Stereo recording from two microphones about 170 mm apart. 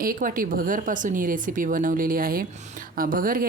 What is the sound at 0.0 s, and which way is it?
Speech, 55° right (ahead or behind).